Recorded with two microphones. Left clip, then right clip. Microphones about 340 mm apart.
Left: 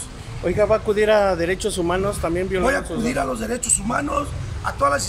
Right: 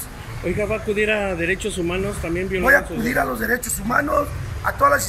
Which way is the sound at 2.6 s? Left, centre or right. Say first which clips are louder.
Right 5 dB; centre.